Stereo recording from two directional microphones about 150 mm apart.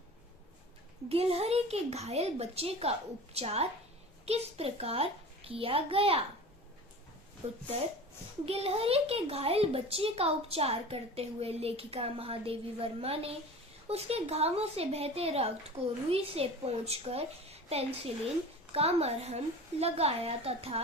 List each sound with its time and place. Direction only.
1.1 s a woman's voice: 40° right (ahead or behind)
7.4 s a woman's voice: 45° right (ahead or behind)